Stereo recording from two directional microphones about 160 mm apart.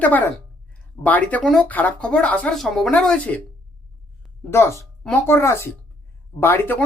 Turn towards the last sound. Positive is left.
turn(degrees=15)  # may be behind; listen again after turning